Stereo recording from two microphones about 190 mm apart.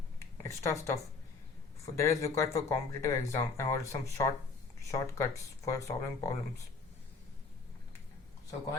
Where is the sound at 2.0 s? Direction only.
15° left (ahead or behind).